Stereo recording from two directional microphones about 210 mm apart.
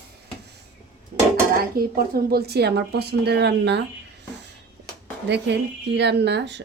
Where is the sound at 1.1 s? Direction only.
45° right (ahead or behind).